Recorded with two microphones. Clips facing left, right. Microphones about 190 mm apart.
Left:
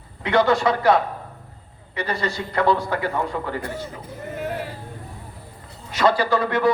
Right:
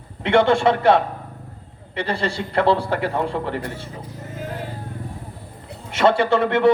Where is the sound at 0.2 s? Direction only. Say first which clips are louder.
Right 2 dB; 25° right (ahead or behind).